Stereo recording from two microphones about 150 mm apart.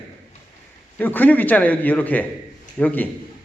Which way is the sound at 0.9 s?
10° left (ahead or behind).